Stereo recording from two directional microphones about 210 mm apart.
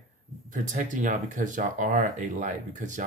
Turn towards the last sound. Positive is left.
turn(degrees=-35)  # may be behind; listen again after turning